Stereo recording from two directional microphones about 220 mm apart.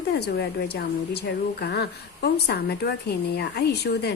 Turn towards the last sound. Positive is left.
turn(degrees=50)  # may be behind; listen again after turning